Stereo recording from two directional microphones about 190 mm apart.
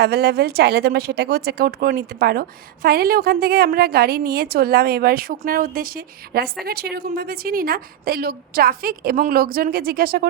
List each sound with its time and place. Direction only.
0.0 s a woman's voice: 55° right (ahead or behind)